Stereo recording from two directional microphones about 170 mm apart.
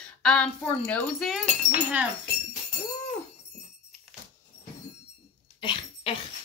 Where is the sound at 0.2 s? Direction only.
5° left (ahead or behind).